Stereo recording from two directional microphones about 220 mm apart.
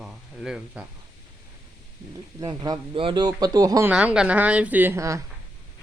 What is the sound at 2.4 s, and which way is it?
Speech, 20° right (ahead or behind).